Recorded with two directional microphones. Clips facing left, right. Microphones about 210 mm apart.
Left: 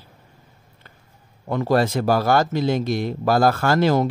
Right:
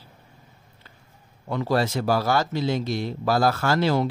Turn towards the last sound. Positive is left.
turn(degrees=50)  # may be behind; listen again after turning